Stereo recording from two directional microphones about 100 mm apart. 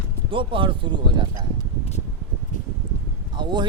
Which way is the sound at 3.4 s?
50° right (ahead or behind).